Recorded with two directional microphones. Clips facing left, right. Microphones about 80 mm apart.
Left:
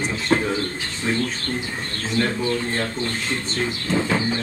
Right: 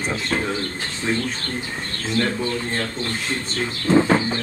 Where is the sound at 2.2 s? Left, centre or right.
Centre.